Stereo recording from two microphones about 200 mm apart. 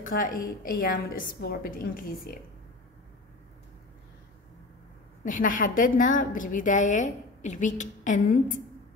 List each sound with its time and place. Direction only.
0.0 s a woman's voice: 45° left (ahead or behind)
5.2 s a woman's voice: 40° left (ahead or behind)